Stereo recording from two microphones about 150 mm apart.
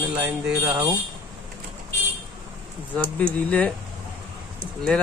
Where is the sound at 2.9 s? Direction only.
5° left (ahead or behind).